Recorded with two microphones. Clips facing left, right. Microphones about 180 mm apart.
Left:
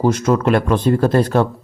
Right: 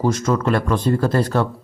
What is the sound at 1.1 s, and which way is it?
Speech, 25° left (ahead or behind).